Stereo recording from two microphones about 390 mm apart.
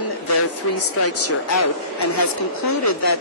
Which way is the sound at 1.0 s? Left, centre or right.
Left.